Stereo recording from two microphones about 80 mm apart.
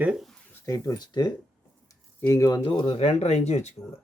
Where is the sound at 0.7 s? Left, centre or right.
Left.